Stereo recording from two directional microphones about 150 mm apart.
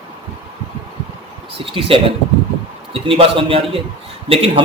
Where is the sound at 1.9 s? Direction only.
40° right (ahead or behind).